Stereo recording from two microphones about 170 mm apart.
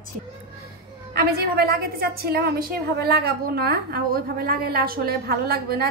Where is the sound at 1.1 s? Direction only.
70° right (ahead or behind).